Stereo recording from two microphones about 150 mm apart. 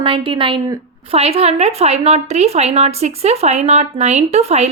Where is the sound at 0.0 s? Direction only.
35° right (ahead or behind).